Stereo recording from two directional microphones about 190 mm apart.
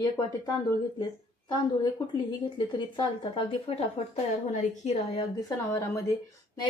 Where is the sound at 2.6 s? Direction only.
25° left (ahead or behind).